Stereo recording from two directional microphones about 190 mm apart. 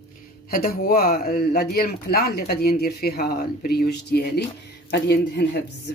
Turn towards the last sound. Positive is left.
turn(degrees=60)  # may be behind; listen again after turning